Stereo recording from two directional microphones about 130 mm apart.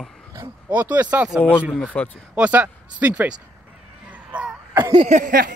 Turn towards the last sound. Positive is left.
turn(degrees=-75)  # may be behind; listen again after turning